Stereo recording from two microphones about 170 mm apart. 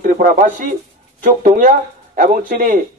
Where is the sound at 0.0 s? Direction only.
50° right (ahead or behind).